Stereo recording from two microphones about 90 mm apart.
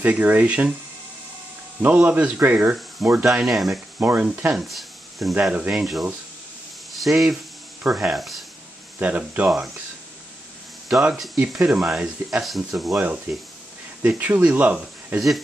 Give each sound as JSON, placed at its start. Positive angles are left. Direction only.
{"t": 0.0, "sound": "speech", "side_deg": -15}
{"t": 1.8, "sound": "speech", "side_deg": -15}
{"t": 3.3, "sound": "speech", "side_deg": -5}
{"t": 4.0, "sound": "speech", "side_deg": -20}
{"t": 4.6, "sound": "a sound", "side_deg": 0}
{"t": 5.4, "sound": "speech", "side_deg": -10}
{"t": 6.9, "sound": "speech", "side_deg": 0}
{"t": 9.0, "sound": "speech", "side_deg": -15}
{"t": 10.9, "sound": "speech", "side_deg": -5}
{"t": 14.0, "sound": "speech", "side_deg": -20}
{"t": 15.1, "sound": "speech", "side_deg": 0}